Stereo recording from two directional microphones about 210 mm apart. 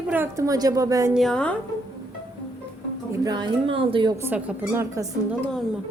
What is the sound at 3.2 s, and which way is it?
A woman's voice, 20° right (ahead or behind).